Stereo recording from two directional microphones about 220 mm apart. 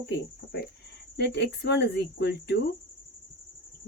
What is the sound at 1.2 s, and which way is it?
Speech, 50° left (ahead or behind).